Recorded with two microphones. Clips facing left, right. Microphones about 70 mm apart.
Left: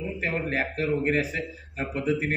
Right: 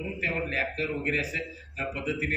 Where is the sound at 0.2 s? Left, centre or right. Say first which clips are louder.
Left 2 dB; left.